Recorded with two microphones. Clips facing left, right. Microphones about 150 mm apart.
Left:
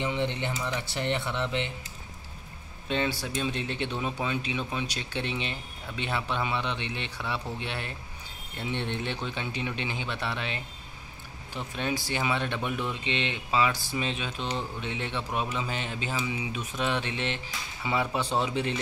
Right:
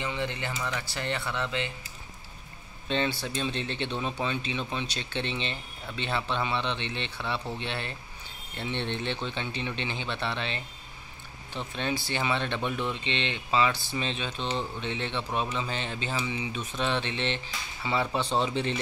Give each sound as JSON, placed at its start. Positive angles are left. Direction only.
{"t": 0.0, "sound": "speech", "side_deg": 20}
{"t": 2.9, "sound": "speech", "side_deg": 10}